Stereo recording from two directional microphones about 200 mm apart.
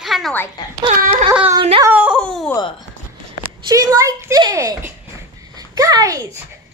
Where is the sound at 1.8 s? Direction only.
10° right (ahead or behind).